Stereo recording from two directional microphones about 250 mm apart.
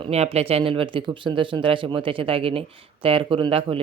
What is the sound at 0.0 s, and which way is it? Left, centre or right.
Speech, right.